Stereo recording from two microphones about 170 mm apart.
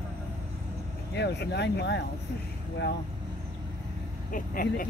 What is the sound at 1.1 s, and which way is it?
Speech, 85° left.